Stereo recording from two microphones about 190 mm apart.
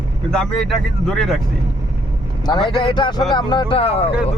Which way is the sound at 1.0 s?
5° left (ahead or behind).